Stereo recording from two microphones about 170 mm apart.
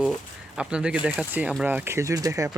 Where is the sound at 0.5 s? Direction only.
5° right (ahead or behind).